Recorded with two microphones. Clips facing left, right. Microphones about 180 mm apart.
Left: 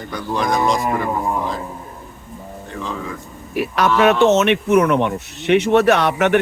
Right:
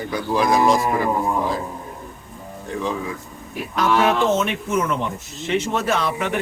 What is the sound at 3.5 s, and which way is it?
Speech, 70° left (ahead or behind).